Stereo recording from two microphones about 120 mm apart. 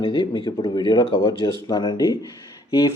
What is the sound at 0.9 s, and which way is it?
Speech, 40° left (ahead or behind).